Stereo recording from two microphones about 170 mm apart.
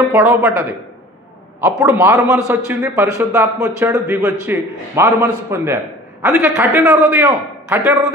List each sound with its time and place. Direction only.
0.1 s a man's voice: 15° right (ahead or behind)
1.6 s a man's voice: 15° right (ahead or behind)